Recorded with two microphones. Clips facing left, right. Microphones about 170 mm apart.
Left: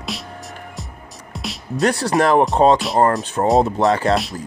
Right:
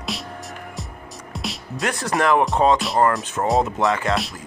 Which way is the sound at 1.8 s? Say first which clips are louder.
Left 4 dB; 35° left (ahead or behind).